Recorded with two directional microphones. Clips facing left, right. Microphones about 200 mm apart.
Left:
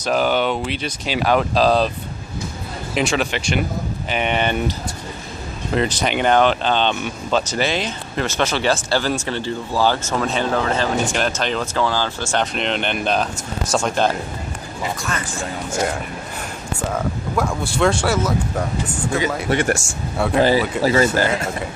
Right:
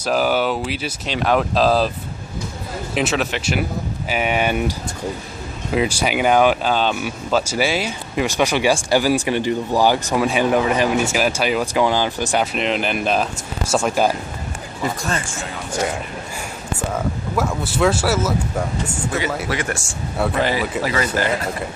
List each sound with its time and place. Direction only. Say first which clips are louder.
0.0 s speech: even; 5° right (ahead or behind)
2.9 s speech: left 1 dB; centre (ahead or behind)
12.5 s speech: right 1 dB; 5° right (ahead or behind)
16.9 s speech: even; 5° right (ahead or behind)
20.8 s speech: left 5 dB; 25° left (ahead or behind)